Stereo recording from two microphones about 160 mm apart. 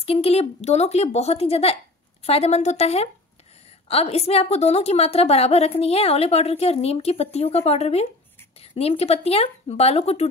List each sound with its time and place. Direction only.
0.0 s a woman's voice: 40° left (ahead or behind)